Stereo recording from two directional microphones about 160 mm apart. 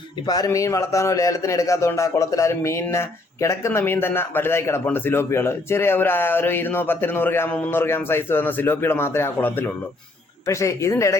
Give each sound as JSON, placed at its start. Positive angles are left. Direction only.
{"t": 0.3, "sound": "a man's voice", "side_deg": 20}